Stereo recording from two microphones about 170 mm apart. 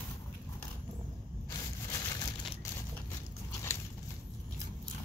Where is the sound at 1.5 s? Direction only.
20° left (ahead or behind).